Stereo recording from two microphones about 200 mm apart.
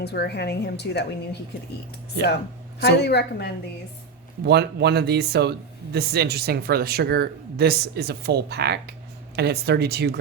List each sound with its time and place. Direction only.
0.0 s a woman's voice: 55° left (ahead or behind)
2.8 s a woman's voice: 55° left (ahead or behind)
4.4 s speech: 55° right (ahead or behind)